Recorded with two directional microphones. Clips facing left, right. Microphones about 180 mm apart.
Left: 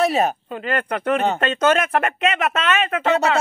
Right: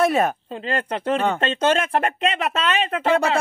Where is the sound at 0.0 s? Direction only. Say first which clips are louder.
Even; 50° right (ahead or behind).